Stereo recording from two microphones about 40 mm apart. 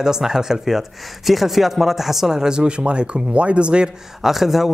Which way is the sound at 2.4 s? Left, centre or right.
Centre.